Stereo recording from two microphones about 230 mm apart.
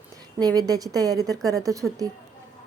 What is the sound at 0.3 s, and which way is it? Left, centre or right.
Speech, centre.